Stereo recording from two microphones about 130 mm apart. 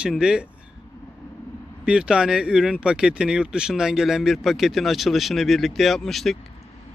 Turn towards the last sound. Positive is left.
turn(degrees=0)  # may be behind; listen again after turning